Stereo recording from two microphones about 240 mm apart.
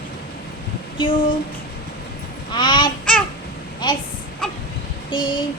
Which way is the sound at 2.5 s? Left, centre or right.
Centre.